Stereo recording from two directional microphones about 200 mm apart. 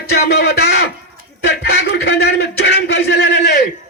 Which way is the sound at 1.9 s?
55° left (ahead or behind).